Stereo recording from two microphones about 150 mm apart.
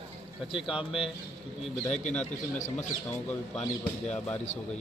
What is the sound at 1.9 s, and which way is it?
Speech, 50° left (ahead or behind).